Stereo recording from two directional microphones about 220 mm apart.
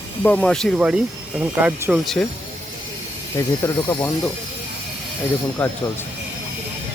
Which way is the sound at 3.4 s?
15° left (ahead or behind).